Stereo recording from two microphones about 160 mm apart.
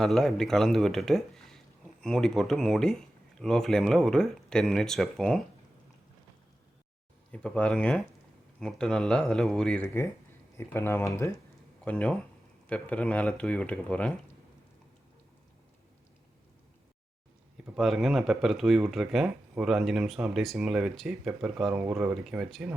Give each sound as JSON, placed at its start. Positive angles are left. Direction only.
{"t": 0.0, "sound": "speech", "side_deg": 5}
{"t": 7.3, "sound": "speech", "side_deg": 5}
{"t": 17.7, "sound": "speech", "side_deg": 0}